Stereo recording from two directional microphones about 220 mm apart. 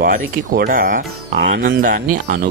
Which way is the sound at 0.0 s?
40° right (ahead or behind).